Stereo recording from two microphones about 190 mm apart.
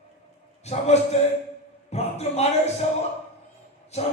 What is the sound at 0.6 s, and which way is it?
A man's voice, 35° left (ahead or behind).